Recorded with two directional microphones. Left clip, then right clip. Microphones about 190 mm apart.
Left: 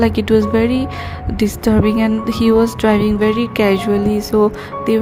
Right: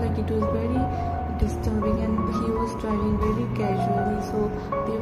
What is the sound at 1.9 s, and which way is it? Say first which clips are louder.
A woman's voice: left 9 dB; 45° left (ahead or behind).